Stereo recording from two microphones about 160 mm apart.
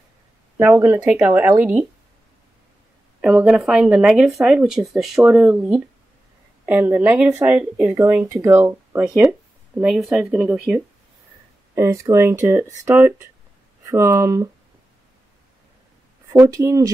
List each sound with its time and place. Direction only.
0.6 s speech: 15° right (ahead or behind)
3.2 s speech: 5° right (ahead or behind)
11.7 s speech: 20° right (ahead or behind)
16.3 s speech: 20° right (ahead or behind)